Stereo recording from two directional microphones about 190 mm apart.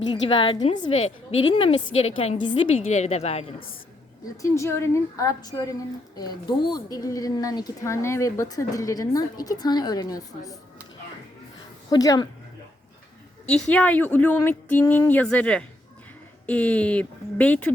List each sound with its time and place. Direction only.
0.1 s a woman's voice: 25° left (ahead or behind)
4.4 s a woman's voice: 15° left (ahead or behind)
11.9 s a woman's voice: 20° left (ahead or behind)
13.5 s a woman's voice: 5° left (ahead or behind)